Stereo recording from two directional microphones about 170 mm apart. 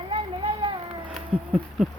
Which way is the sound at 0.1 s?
30° right (ahead or behind).